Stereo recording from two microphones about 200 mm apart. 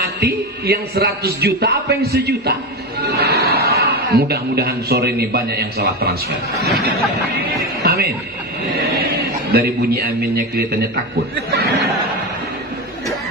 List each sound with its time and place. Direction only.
0.0 s a man's voice: 50° right (ahead or behind)
6.6 s a sound: 55° right (ahead or behind)
8.7 s a man's voice: 50° right (ahead or behind)